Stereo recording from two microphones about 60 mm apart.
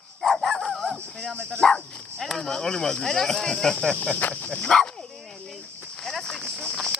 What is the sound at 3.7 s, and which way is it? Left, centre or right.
Cricket, centre.